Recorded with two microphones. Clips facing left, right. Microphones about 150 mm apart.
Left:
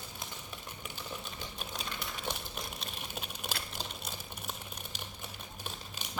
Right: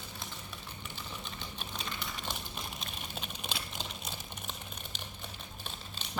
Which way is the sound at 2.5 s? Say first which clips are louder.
Even; 5° left (ahead or behind).